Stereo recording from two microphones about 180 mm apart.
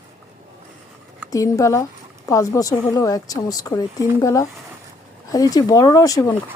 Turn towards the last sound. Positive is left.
turn(degrees=20)  # may be behind; listen again after turning